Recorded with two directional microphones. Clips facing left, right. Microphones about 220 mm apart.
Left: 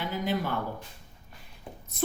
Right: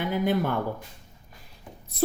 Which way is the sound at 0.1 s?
55° right (ahead or behind).